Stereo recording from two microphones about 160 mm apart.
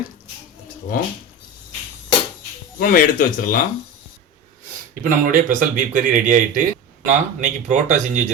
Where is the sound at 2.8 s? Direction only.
60° left (ahead or behind).